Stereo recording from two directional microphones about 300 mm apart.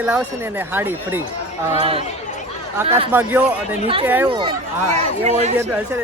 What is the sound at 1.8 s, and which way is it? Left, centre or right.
Speech, centre.